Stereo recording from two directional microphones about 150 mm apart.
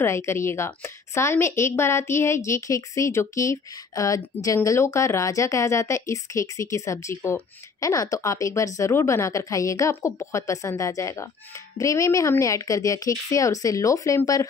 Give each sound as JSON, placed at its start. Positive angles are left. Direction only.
{"t": 0.0, "sound": "a woman's voice", "side_deg": 20}